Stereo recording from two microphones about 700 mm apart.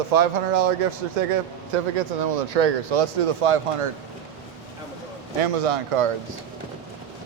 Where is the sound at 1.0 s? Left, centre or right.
Right.